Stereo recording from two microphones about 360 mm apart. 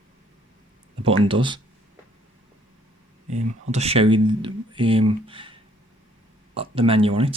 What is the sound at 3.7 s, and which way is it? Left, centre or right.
Speech, centre.